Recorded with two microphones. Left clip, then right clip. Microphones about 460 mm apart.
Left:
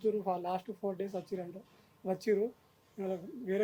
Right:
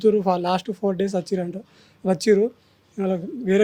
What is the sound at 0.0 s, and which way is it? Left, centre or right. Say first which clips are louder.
Speech: right 14 dB; right.